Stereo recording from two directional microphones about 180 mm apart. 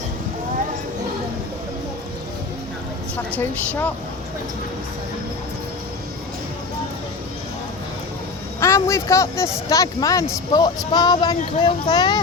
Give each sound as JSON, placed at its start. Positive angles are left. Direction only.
{"t": 3.7, "sound": "a woman's voice", "side_deg": 10}
{"t": 8.6, "sound": "speech", "side_deg": 15}